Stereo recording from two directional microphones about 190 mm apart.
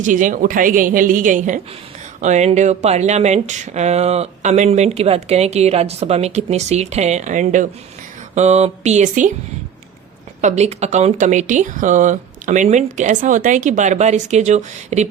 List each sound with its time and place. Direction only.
0.0 s a woman's voice: 45° right (ahead or behind)
10.4 s speech: 35° right (ahead or behind)